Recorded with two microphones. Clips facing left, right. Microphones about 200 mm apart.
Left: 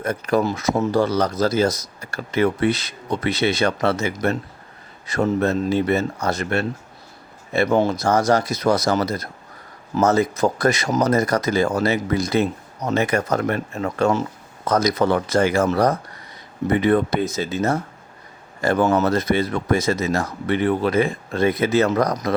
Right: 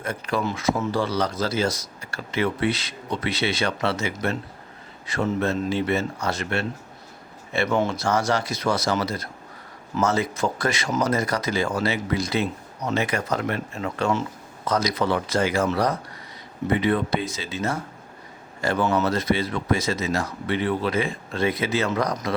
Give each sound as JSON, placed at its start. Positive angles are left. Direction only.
{"t": 0.0, "sound": "speech", "side_deg": 40}